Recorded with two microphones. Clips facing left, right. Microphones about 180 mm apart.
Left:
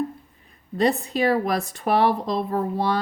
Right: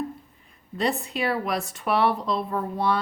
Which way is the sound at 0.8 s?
35° left (ahead or behind).